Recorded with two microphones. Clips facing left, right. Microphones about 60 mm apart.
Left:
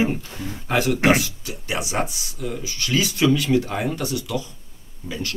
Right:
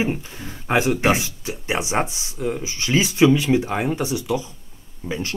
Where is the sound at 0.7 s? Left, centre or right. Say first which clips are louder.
Even; centre.